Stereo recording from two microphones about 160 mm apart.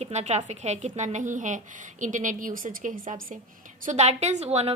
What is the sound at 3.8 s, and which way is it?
Speech, 45° right (ahead or behind).